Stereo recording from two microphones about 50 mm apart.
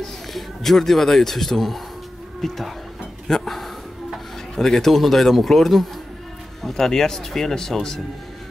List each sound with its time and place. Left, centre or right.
0.0 s speech: centre
3.3 s a sound: centre
6.6 s speech: centre